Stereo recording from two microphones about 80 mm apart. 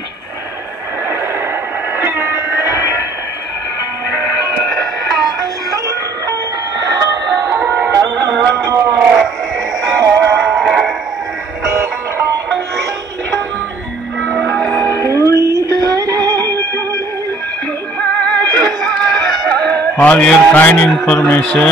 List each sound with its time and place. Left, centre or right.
2.0 s guitar: right
6.9 s music: right
10.5 s music: centre
14.5 s music: centre
15.0 s music: left
15.4 s music: right
18.2 s music: centre
18.7 s music: centre
20.9 s a man's voice: centre